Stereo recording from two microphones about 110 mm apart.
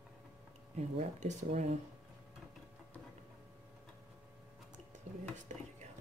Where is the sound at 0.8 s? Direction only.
85° right.